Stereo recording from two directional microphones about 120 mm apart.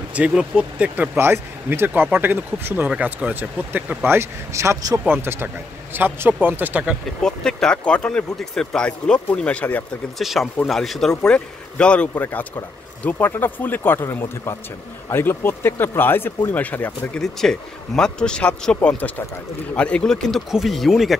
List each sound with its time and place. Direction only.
0.1 s speech: 10° right (ahead or behind)
7.2 s a man's voice: 5° left (ahead or behind)
10.1 s a man's voice: centre (ahead or behind)
17.2 s a man's voice: 5° left (ahead or behind)